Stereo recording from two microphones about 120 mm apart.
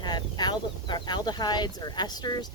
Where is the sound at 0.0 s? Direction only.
35° left (ahead or behind).